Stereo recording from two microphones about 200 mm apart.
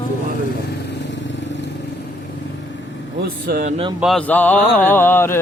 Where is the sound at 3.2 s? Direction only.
45° right (ahead or behind).